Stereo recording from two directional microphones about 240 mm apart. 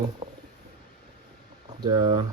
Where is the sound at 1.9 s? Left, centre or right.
Right.